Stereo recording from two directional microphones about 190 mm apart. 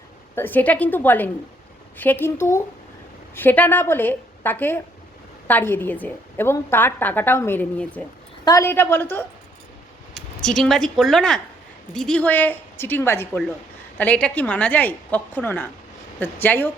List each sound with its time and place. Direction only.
0.3 s a woman's voice: 10° left (ahead or behind)